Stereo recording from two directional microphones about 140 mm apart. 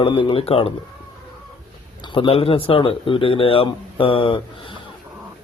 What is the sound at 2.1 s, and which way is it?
Speech, 40° left (ahead or behind).